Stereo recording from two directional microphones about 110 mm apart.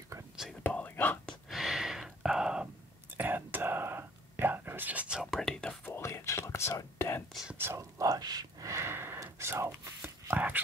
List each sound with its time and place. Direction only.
0.7 s whispering: 15° left (ahead or behind)
1.5 s gasp: 5° right (ahead or behind)
3.1 s whispering: 15° right (ahead or behind)
5.4 s whispering: 5° left (ahead or behind)
5.9 s whispering: 25° left (ahead or behind)
7.5 s whispering: 20° right (ahead or behind)
8.0 s gasp: 35° right (ahead or behind); by 10.6 s 15° right (ahead or behind)